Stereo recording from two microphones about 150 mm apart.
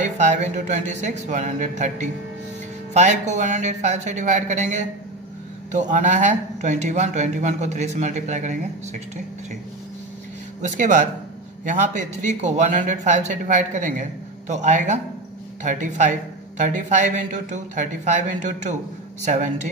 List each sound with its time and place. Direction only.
0.0 s speech: 55° right (ahead or behind)
10.6 s speech: 60° right (ahead or behind)